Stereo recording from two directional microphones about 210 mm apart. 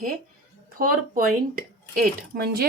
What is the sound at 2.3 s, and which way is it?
Speech, 45° right (ahead or behind).